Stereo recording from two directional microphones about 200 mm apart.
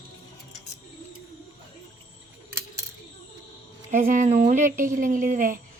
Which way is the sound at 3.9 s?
40° right (ahead or behind).